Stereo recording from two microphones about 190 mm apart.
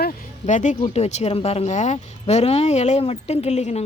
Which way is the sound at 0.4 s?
40° left (ahead or behind).